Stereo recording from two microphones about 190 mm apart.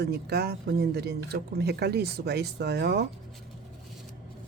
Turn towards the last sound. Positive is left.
turn(degrees=-60)  # may be behind; listen again after turning